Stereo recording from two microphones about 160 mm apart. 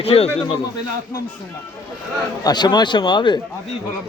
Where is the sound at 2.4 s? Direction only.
25° left (ahead or behind).